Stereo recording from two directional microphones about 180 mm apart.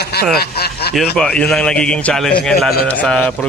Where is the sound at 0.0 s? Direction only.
60° left (ahead or behind).